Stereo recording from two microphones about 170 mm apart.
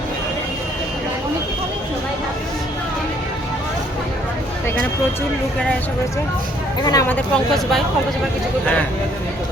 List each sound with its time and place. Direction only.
6.8 s speech: 20° left (ahead or behind)
7.3 s speech: centre (ahead or behind)